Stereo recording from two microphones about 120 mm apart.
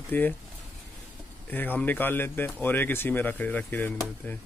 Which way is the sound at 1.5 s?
15° left (ahead or behind).